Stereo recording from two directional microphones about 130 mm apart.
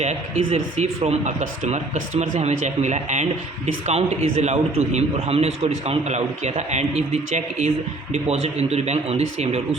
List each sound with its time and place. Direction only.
0.0 s a man's voice: 60° right (ahead or behind)
3.8 s a man's voice: 55° right (ahead or behind)